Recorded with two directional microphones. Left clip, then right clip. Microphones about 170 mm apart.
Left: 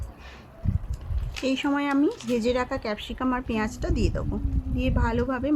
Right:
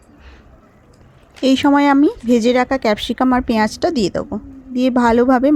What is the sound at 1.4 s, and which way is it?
A woman's voice, 45° right (ahead or behind).